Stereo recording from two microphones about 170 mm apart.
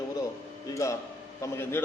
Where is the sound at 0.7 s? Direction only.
20° left (ahead or behind).